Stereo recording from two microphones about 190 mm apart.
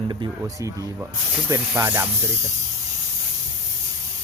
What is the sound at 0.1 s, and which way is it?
A man's voice, 20° right (ahead or behind).